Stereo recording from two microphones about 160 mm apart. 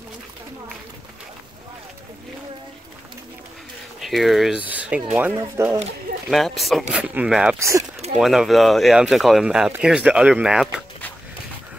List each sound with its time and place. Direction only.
4.0 s speech: centre (ahead or behind); by 5.8 s 15° right (ahead or behind)
6.3 s speech: centre (ahead or behind)
7.5 s speech: 20° right (ahead or behind)
8.2 s speech: centre (ahead or behind)